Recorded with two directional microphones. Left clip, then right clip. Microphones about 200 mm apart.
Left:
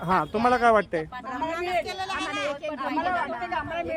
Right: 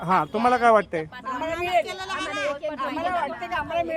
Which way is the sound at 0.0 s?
Centre (ahead or behind).